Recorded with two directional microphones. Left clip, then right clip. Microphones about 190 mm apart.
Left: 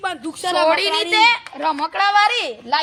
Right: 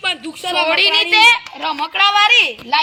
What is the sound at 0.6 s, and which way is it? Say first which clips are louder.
A woman's voice: right 4 dB; 65° left (ahead or behind).